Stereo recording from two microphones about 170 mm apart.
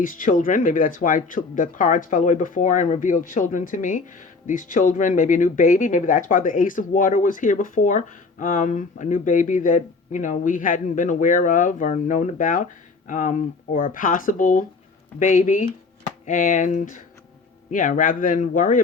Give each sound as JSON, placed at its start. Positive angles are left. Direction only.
{"t": 0.0, "sound": "speech", "side_deg": 50}